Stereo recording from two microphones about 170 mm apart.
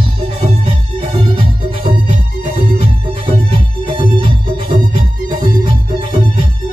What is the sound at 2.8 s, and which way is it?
Music, 35° right (ahead or behind).